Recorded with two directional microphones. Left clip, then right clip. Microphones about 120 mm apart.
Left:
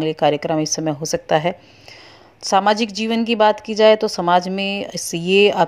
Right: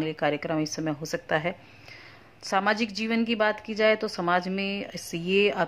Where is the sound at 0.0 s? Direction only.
35° left (ahead or behind).